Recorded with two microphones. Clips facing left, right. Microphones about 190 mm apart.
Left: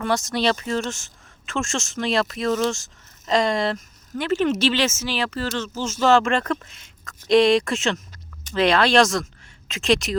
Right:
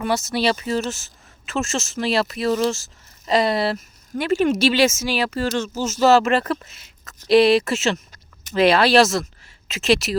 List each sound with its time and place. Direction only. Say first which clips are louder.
0.0 s a woman's voice: right 1 dB; 5° right (ahead or behind)